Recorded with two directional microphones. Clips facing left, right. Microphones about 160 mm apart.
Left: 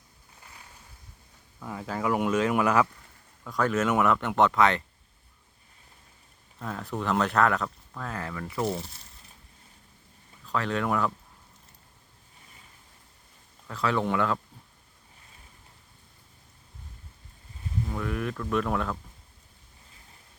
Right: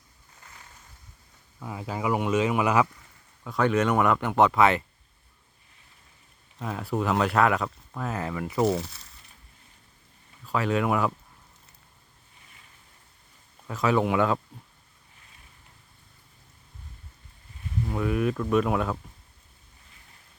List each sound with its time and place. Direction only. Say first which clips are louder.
1.5 s speech: even; 5° right (ahead or behind)
3.6 s speech: right 2 dB; 5° left (ahead or behind)
6.6 s speech: right 4 dB; 10° right (ahead or behind)
8.7 s speech: right 5 dB; 80° right
10.4 s speech: right 3 dB; 10° right (ahead or behind)
13.7 s speech: right 3 dB; 15° right (ahead or behind)
17.9 s speech: right 7 dB; 15° right (ahead or behind)